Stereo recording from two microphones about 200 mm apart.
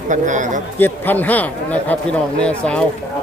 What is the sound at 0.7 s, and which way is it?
A man's voice, 10° left (ahead or behind).